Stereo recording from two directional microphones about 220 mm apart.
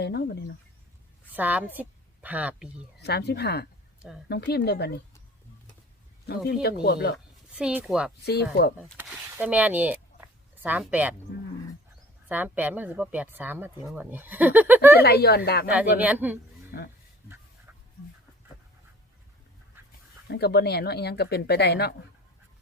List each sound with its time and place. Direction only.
0.0 s speech: 45° left (ahead or behind)
1.3 s a woman's voice: 10° right (ahead or behind)
3.0 s speech: 50° left (ahead or behind)
6.2 s speech: 45° left (ahead or behind)
7.5 s speech: 5° right (ahead or behind)
8.2 s speech: 45° left (ahead or behind)
9.0 s speech: 5° right (ahead or behind)
12.3 s speech: 10° right (ahead or behind)
15.0 s speech: 45° left (ahead or behind)
15.6 s speech: 5° right (ahead or behind)
16.7 s speech: 45° left (ahead or behind)
17.7 s dog: 10° right (ahead or behind)
20.3 s speech: 45° left (ahead or behind)